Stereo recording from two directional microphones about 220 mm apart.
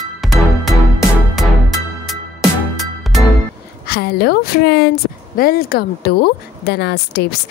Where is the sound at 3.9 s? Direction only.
45° left (ahead or behind).